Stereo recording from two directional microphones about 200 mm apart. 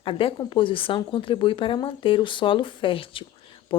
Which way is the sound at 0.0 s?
25° left (ahead or behind).